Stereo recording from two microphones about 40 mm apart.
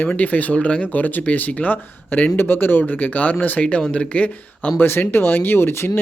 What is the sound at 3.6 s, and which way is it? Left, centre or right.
Speech, left.